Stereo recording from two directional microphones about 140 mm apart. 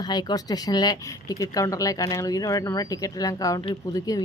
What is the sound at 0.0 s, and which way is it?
Speech, 30° left (ahead or behind).